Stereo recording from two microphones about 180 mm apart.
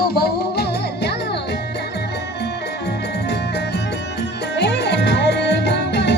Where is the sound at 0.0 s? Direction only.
60° left (ahead or behind).